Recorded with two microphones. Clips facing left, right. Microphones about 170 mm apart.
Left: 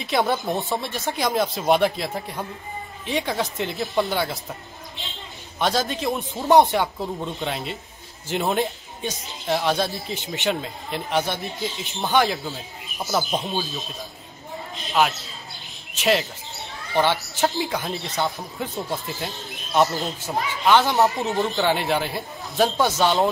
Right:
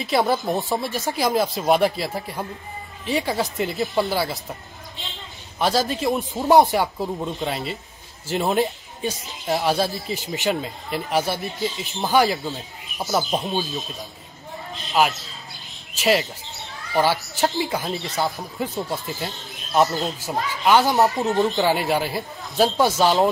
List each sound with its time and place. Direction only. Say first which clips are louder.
0.0 s a man's voice: right 2 dB; centre (ahead or behind)
5.6 s a man's voice: right 2 dB; 5° right (ahead or behind)
14.9 s a man's voice: right 1 dB; centre (ahead or behind)
20.2 s speech: even; 20° left (ahead or behind)
20.9 s a man's voice: right 2 dB; centre (ahead or behind)